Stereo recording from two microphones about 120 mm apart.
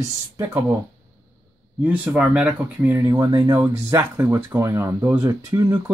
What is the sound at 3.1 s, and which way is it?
Speech, 35° right (ahead or behind).